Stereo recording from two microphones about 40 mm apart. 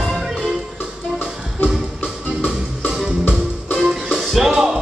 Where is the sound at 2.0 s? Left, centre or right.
Left.